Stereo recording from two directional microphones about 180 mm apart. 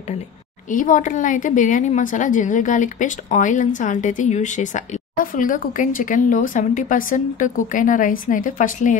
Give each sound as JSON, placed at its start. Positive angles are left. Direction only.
{"t": 0.7, "sound": "a woman's voice", "side_deg": 45}